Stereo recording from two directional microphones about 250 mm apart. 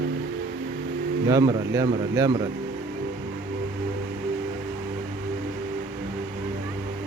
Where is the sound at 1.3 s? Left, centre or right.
Centre.